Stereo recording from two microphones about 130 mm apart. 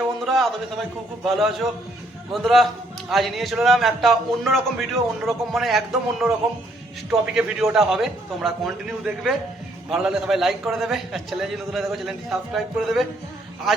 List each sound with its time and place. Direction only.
0.3 s a man's voice: centre (ahead or behind)
7.3 s a man's voice: 5° right (ahead or behind)